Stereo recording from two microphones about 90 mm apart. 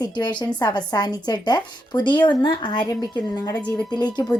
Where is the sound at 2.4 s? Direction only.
60° left (ahead or behind).